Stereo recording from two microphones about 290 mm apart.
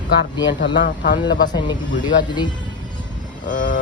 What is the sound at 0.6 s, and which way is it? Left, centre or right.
Speech, left.